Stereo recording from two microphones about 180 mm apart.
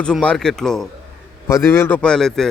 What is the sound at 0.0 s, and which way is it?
Speech, 5° left (ahead or behind).